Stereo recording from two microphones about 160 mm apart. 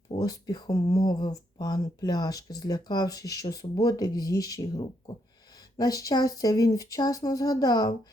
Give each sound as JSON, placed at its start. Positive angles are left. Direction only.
{"t": 0.1, "sound": "speech", "side_deg": 25}